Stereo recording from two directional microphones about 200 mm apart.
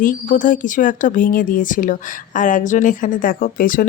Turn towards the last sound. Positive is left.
turn(degrees=45)  # may be behind; listen again after turning